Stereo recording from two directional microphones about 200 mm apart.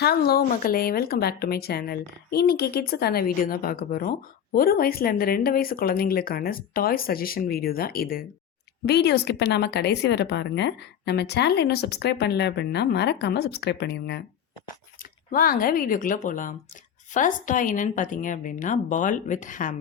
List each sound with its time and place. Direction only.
0.0 s a woman's voice: 50° left (ahead or behind)
15.3 s a woman's voice: 45° left (ahead or behind)